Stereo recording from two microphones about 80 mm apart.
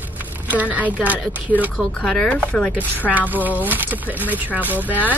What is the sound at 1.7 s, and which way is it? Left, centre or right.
Speech, centre.